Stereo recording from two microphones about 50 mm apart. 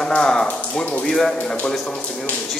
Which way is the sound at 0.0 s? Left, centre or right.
Centre.